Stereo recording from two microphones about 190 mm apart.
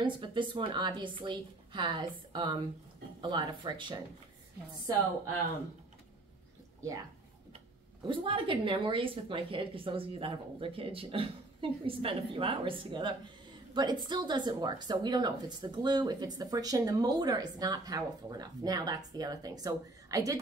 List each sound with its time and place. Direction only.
0.0 s a woman's voice: 25° right (ahead or behind)
8.1 s a woman's voice: 25° right (ahead or behind)